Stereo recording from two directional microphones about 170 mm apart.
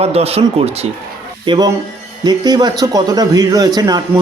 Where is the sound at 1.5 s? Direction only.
25° right (ahead or behind).